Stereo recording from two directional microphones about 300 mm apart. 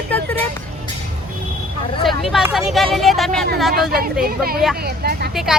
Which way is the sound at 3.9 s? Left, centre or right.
Right.